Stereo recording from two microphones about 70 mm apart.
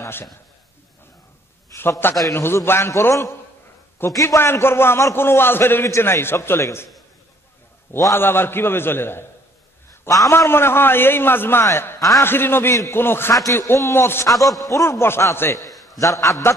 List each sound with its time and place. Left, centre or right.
0.0 s a man's voice: left
1.8 s a man's voice: left
8.0 s a man's voice: left
10.0 s a man's voice: left
13.3 s a man's voice: left
16.0 s a man's voice: left